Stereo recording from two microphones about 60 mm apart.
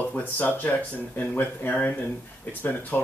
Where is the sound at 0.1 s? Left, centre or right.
Left.